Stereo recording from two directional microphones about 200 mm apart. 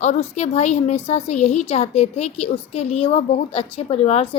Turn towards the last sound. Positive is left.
turn(degrees=30)  # may be behind; listen again after turning